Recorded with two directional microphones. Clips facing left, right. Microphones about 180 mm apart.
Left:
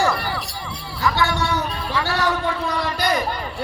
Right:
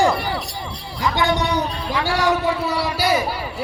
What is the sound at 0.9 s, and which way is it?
A man's voice, 15° right (ahead or behind).